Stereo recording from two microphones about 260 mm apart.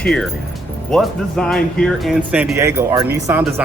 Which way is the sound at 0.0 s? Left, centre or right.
Centre.